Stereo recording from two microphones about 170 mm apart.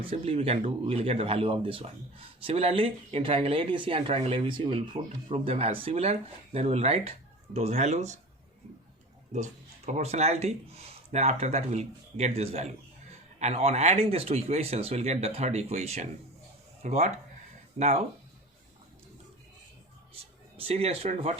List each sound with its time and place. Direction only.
0.0 s speech: 35° right (ahead or behind)
9.3 s speech: 45° right (ahead or behind)
20.6 s speech: 35° right (ahead or behind)